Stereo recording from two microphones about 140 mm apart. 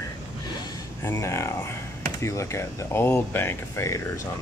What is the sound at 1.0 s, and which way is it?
Speech, 20° left (ahead or behind).